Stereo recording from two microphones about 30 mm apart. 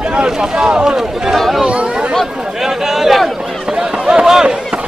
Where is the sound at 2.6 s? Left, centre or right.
Centre.